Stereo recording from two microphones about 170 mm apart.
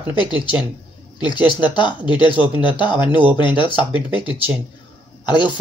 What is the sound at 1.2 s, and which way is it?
Speech, 25° left (ahead or behind).